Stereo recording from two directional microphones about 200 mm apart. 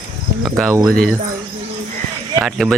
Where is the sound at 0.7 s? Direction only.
20° right (ahead or behind).